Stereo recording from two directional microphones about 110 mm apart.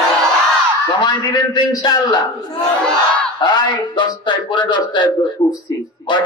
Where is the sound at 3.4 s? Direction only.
45° left (ahead or behind).